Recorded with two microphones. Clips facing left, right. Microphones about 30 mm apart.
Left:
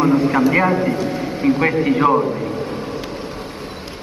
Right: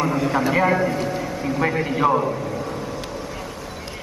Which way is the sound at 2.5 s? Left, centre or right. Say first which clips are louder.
Left 3 dB; left.